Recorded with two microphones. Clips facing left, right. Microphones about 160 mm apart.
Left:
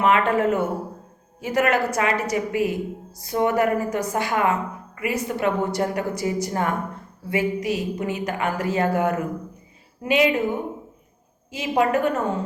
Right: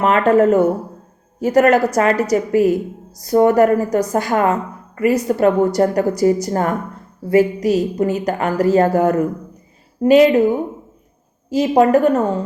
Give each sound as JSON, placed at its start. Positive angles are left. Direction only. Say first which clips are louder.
{"t": 0.0, "sound": "a woman's voice", "louder": "right 6 dB", "side_deg": -40}
{"t": 11.5, "sound": "a woman's voice", "louder": "right 8 dB", "side_deg": -40}